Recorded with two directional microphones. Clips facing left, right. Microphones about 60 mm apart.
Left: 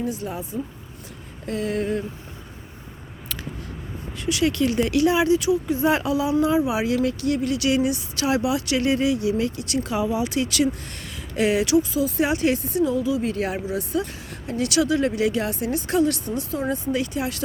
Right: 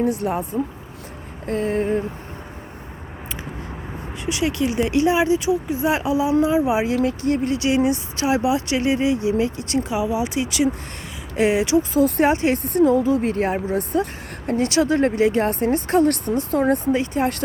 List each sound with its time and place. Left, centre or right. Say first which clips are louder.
0.0 s speech: right 7 dB; right
1.5 s speech: right 4 dB; right
4.3 s speech: left 1 dB; right
5.8 s speech: left 1 dB; centre
6.1 s speech: right 2 dB; right
9.9 s speech: left 1 dB; centre
11.3 s speech: right 2 dB; right
11.9 s speech: right 5 dB; right
12.3 s speech: right 2 dB; right
12.6 s speech: right 5 dB; right
13.4 s speech: right 4 dB; right
16.9 s speech: right 4 dB; right